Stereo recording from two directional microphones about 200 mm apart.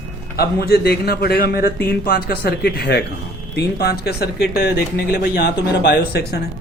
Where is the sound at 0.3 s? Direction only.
50° left (ahead or behind).